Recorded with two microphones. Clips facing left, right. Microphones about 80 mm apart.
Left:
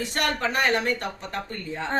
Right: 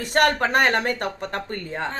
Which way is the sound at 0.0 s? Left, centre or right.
Right.